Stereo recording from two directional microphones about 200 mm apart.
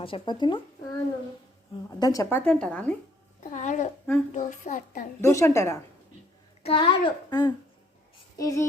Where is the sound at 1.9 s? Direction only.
15° left (ahead or behind).